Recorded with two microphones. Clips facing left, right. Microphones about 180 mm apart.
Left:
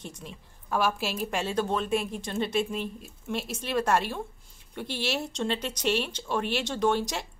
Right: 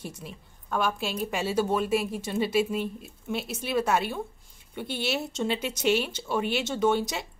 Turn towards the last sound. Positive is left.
turn(degrees=-5)  # may be behind; listen again after turning